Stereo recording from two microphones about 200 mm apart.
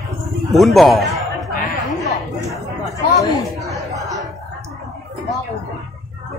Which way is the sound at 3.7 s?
15° right (ahead or behind).